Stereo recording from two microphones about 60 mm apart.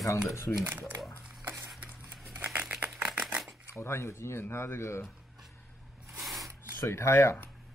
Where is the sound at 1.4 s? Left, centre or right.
Right.